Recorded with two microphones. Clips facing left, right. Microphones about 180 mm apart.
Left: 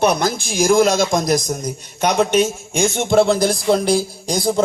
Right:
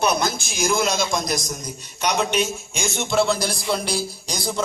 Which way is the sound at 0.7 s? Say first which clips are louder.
Left 8 dB; 50° left (ahead or behind).